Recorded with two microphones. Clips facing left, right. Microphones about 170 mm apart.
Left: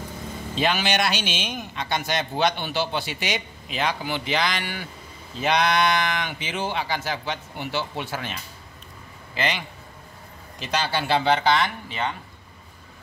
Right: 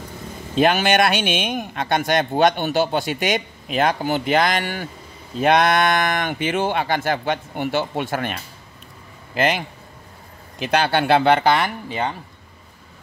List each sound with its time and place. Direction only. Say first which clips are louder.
0.6 s speech: right 7 dB; 50° right (ahead or behind)